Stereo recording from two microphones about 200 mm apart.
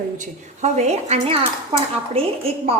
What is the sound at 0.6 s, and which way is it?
A woman's voice, 35° right (ahead or behind).